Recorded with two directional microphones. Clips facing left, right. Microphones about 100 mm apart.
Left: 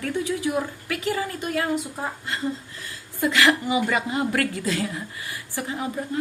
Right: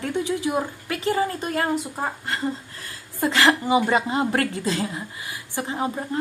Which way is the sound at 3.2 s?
35° right (ahead or behind).